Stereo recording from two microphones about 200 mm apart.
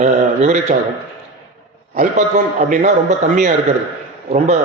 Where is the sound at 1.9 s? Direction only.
45° right (ahead or behind).